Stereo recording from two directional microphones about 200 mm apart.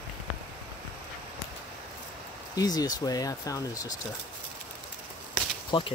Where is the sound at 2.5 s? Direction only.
20° left (ahead or behind).